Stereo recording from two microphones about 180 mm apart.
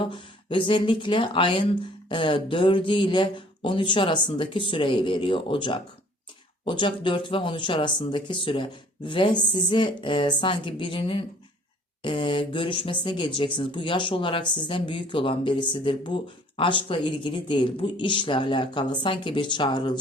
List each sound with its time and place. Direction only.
0.0 s speech: 30° left (ahead or behind)